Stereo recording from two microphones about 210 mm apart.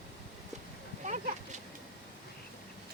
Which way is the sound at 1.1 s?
35° right (ahead or behind).